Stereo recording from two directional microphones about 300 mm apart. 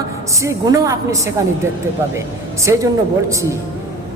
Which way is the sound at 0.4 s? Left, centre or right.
Centre.